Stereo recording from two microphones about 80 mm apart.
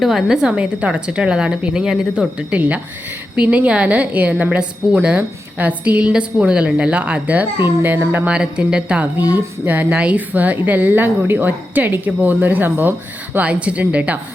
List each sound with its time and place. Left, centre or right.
0.0 s a woman's voice: centre; by 8.3 s right
8.3 s a woman's voice: centre